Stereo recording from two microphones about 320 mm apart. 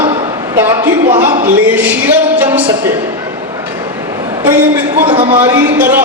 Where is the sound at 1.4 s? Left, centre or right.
Centre.